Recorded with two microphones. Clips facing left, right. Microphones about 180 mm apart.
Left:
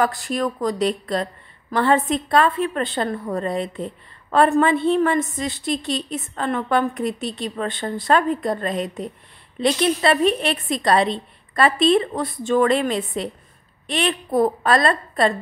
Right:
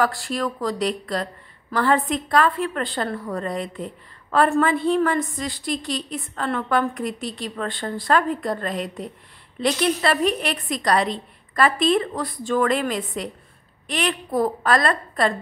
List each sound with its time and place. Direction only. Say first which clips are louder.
0.0 s a woman's voice: left 2 dB; 20° left (ahead or behind)